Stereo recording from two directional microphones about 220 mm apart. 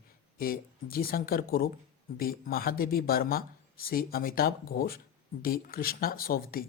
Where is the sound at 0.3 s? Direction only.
40° left (ahead or behind).